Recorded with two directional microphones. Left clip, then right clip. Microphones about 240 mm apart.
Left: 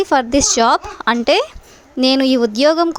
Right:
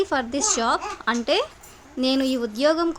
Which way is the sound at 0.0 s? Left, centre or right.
Left.